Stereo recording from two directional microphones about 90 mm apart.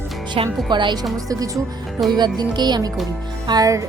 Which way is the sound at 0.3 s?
60° right (ahead or behind).